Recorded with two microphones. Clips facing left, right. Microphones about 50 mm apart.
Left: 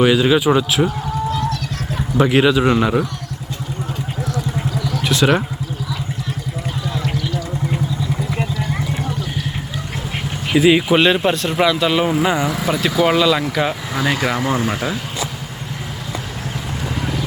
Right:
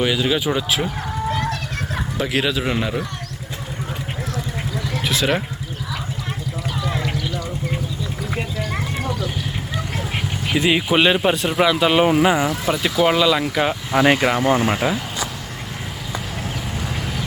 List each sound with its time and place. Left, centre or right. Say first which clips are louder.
0.0 s speech: left 6 dB; centre
1.3 s a sound: even; right
2.1 s speech: left 8 dB; centre
5.0 s speech: left 5 dB; centre
7.0 s a sound: left 2 dB; centre
10.7 s speech: left 3 dB; centre
12.2 s speech: even; centre
13.9 s speech: right 8 dB; right
14.3 s speech: right 2 dB; centre
14.8 s speech: right 2 dB; centre